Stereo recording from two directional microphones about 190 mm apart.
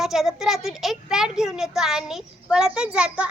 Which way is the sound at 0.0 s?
Centre (ahead or behind).